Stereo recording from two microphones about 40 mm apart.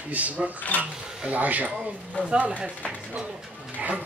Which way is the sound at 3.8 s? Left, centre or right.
Right.